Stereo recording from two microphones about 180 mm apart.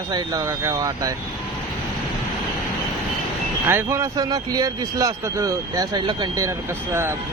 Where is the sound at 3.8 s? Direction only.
20° right (ahead or behind).